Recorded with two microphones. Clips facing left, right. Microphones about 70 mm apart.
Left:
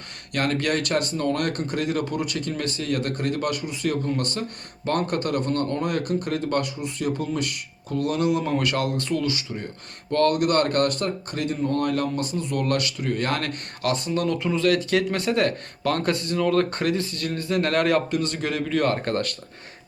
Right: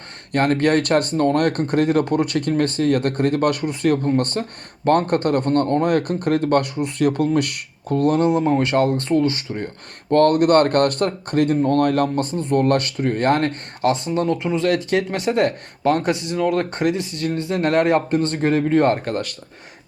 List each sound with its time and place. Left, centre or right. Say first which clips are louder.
0.3 s speech: right 7 dB; right
8.0 s speech: right 6 dB; right
19.0 s speech: right 1 dB; centre